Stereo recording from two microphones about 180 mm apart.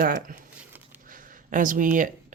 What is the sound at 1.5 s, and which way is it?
Speech, 50° right (ahead or behind).